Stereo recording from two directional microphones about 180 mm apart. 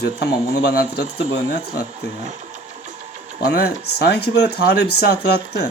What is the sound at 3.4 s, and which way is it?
Speech, 60° left (ahead or behind).